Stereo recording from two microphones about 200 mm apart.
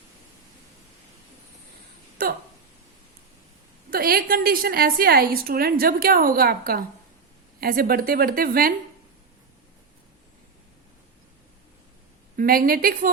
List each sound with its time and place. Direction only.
2.2 s speech: 45° right (ahead or behind)
3.8 s a woman's voice: 50° right (ahead or behind)
12.4 s a woman's voice: 45° right (ahead or behind)